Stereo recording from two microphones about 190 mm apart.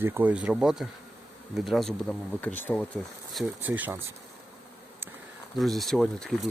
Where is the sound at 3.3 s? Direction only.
5° right (ahead or behind).